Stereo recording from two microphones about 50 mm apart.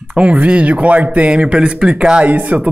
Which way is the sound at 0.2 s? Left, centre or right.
Right.